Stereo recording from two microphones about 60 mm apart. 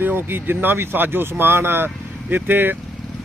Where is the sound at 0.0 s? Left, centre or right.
Right.